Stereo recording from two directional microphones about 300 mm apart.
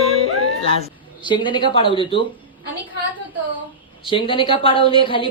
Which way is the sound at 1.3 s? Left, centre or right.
Centre.